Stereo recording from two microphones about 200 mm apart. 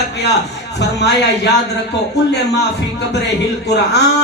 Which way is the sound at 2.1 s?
55° left (ahead or behind).